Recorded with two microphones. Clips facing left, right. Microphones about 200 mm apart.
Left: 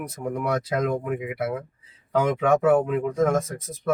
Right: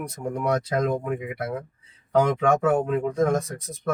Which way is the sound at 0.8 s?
40° right (ahead or behind).